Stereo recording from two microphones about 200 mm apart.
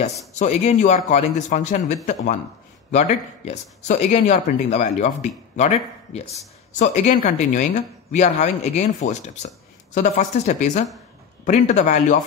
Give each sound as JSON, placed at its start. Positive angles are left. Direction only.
{"t": 0.3, "sound": "speech", "side_deg": 35}
{"t": 2.9, "sound": "speech", "side_deg": 35}